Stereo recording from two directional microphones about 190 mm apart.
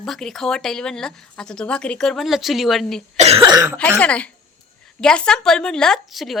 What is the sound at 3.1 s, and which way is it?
Cough, 35° right (ahead or behind).